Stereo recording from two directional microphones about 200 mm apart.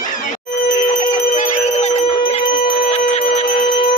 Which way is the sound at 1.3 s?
35° left (ahead or behind).